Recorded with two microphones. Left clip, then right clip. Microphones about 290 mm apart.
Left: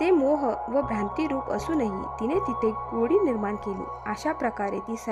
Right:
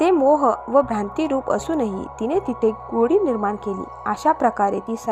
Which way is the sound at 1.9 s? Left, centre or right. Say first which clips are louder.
Right 3 dB; centre.